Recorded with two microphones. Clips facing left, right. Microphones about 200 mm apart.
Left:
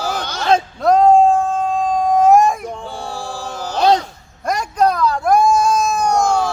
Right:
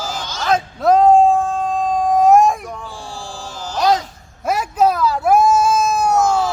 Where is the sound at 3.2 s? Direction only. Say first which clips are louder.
Left 4 dB; 60° left (ahead or behind).